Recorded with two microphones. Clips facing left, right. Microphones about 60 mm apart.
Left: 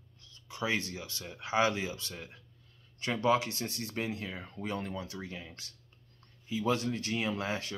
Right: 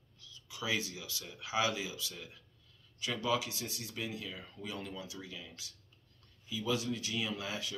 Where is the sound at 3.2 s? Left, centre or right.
Left.